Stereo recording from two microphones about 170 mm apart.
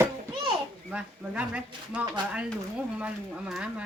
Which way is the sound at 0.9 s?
5° right (ahead or behind).